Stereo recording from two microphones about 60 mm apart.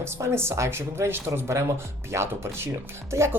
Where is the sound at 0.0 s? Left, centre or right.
Right.